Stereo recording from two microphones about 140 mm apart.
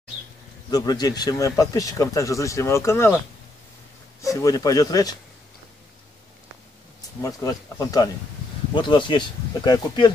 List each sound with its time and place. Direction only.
0.7 s speech: 30° left (ahead or behind)
4.2 s speech: 25° left (ahead or behind)
7.2 s speech: 25° left (ahead or behind)